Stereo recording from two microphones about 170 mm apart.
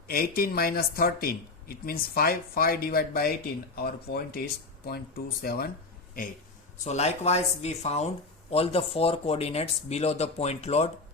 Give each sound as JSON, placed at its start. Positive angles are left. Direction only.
{"t": 0.1, "sound": "speech", "side_deg": 60}
{"t": 6.8, "sound": "speech", "side_deg": 40}